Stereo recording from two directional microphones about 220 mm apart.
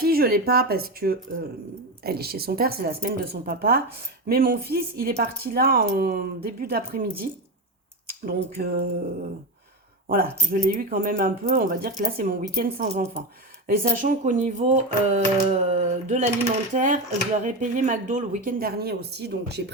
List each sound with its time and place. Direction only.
0.0 s speech: 45° right (ahead or behind)
10.5 s speech: 35° right (ahead or behind)